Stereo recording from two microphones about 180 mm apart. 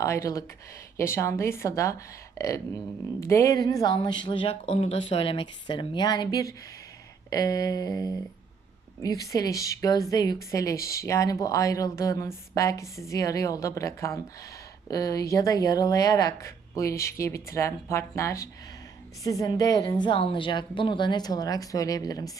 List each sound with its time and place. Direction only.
0.0 s a woman's voice: 15° left (ahead or behind)
3.2 s a woman's voice: 15° left (ahead or behind)